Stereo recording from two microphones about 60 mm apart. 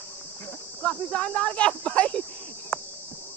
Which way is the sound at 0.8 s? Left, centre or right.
Centre.